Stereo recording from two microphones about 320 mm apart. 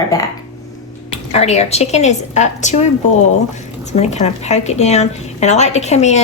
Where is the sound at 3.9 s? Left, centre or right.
Left.